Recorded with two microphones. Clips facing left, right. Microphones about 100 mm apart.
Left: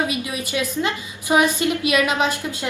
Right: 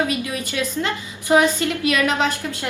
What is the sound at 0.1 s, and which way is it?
A woman's voice, 20° left (ahead or behind).